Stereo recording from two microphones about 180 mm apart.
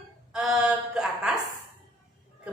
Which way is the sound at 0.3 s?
5° right (ahead or behind).